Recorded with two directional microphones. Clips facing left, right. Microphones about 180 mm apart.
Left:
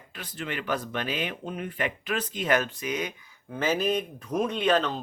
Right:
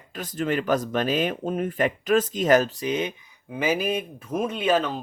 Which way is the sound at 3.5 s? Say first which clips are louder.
Right 1 dB; 10° right (ahead or behind).